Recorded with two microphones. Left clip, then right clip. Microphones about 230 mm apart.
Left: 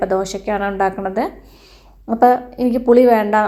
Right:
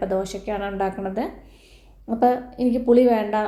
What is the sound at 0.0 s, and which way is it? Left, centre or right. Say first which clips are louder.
A woman's voice: left 6 dB; left.